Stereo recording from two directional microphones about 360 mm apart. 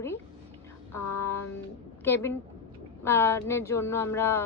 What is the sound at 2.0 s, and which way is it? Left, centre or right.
A woman's voice, centre.